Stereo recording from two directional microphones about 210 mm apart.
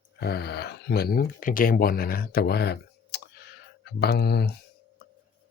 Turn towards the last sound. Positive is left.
turn(degrees=50)  # may be behind; listen again after turning